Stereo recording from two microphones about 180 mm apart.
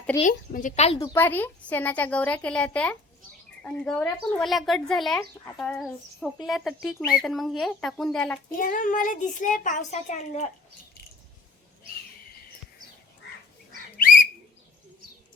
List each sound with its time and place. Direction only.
0.2 s a child's voice: 45° left (ahead or behind)
0.9 s a woman's voice: 15° left (ahead or behind)
8.5 s a child's voice: 50° left (ahead or behind)